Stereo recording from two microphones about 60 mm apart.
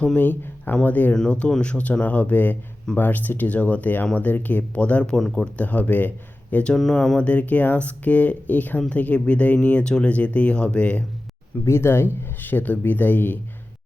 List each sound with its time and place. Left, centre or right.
0.2 s speech: left
1.1 s speech: centre
6.7 s speech: centre
7.2 s speech: left
11.6 s speech: left